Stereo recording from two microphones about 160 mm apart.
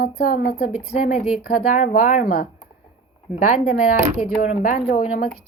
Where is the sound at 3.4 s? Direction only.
60° left (ahead or behind).